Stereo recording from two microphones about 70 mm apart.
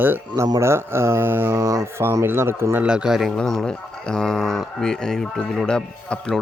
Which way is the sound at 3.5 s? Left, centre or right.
Centre.